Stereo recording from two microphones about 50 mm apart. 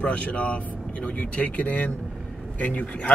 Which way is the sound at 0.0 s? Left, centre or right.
Left.